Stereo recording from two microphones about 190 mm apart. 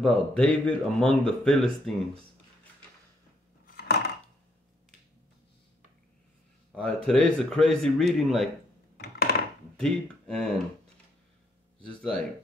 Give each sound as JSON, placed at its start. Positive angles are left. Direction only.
{"t": 0.0, "sound": "speech", "side_deg": 5}
{"t": 3.6, "sound": "a sound", "side_deg": 55}
{"t": 6.7, "sound": "speech", "side_deg": 5}
{"t": 8.9, "sound": "a sound", "side_deg": 55}
{"t": 9.8, "sound": "speech", "side_deg": 5}
{"t": 11.8, "sound": "speech", "side_deg": 5}